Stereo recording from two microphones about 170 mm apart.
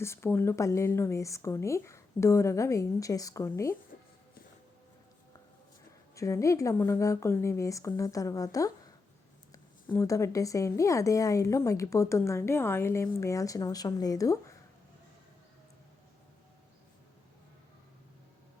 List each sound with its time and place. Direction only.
0.0 s speech: 15° left (ahead or behind)
6.1 s speech: 20° left (ahead or behind)
9.9 s speech: 20° left (ahead or behind)